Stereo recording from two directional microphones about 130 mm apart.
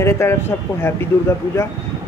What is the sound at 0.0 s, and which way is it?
Speech, 20° left (ahead or behind).